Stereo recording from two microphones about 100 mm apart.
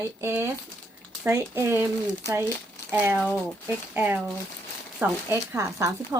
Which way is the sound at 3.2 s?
15° left (ahead or behind).